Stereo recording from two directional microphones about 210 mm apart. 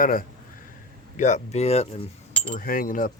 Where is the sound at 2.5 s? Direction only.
40° left (ahead or behind).